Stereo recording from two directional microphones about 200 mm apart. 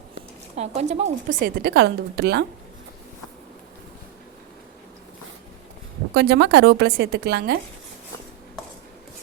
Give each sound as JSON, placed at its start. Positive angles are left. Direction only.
{"t": 0.5, "sound": "speech", "side_deg": -35}
{"t": 6.1, "sound": "a woman's voice", "side_deg": -55}